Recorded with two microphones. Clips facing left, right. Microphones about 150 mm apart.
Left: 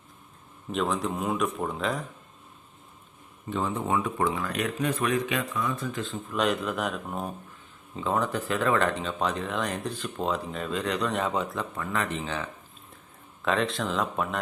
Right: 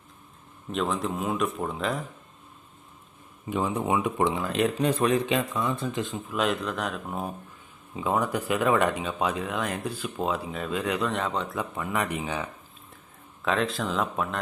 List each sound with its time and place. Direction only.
0.7 s speech: centre (ahead or behind)
3.5 s speech: 10° right (ahead or behind)
6.2 s speech: centre (ahead or behind)
11.5 s speech: 10° right (ahead or behind)
13.4 s speech: centre (ahead or behind)